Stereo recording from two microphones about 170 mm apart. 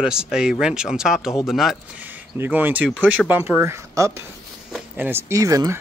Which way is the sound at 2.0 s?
10° right (ahead or behind).